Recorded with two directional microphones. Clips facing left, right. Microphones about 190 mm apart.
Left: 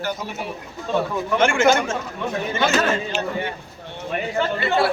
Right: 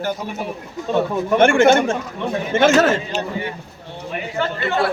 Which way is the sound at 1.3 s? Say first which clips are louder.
Right 5 dB; 55° right (ahead or behind).